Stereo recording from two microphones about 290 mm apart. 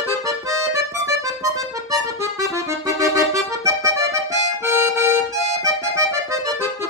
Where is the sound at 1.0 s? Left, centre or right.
Centre.